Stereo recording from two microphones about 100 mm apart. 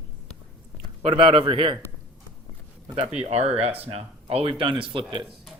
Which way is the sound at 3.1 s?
90° right.